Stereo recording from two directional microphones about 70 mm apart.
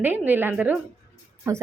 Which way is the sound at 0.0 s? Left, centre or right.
Right.